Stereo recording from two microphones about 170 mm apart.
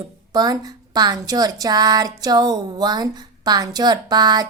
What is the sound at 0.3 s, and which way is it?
A woman's voice, 25° right (ahead or behind).